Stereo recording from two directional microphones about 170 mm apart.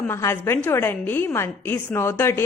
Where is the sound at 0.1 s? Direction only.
15° left (ahead or behind).